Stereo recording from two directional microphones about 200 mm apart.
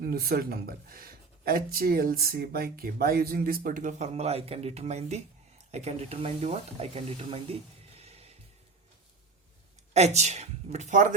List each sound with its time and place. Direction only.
0.0 s speech: 50° right (ahead or behind); by 7.5 s 30° right (ahead or behind)
7.9 s music: 30° right (ahead or behind)
9.9 s speech: 35° right (ahead or behind)